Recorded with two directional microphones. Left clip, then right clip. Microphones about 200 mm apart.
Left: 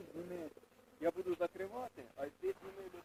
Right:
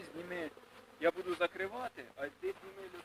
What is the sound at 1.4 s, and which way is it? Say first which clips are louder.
Speech: right 4 dB; 30° left (ahead or behind).